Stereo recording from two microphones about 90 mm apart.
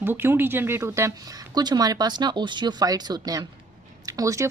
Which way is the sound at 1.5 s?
45° right (ahead or behind).